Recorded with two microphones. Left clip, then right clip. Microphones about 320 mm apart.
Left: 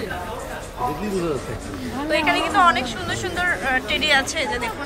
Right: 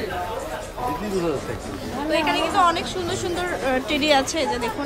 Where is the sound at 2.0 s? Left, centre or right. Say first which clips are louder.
Left 2 dB; centre.